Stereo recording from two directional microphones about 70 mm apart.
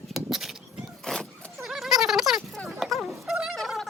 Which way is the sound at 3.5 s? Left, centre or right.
Centre.